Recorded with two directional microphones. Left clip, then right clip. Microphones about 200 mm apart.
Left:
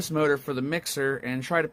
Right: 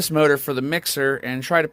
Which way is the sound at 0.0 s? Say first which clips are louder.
Right 7 dB; 25° right (ahead or behind).